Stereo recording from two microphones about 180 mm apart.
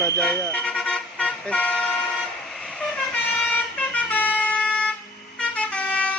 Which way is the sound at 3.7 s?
10° left (ahead or behind).